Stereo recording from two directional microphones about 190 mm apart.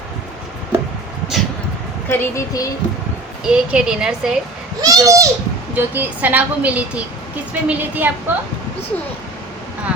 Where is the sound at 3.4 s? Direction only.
5° right (ahead or behind).